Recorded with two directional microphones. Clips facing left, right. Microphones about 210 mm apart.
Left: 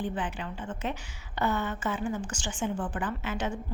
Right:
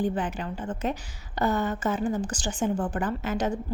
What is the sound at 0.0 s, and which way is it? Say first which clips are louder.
A woman's voice: right 5 dB; 40° right (ahead or behind).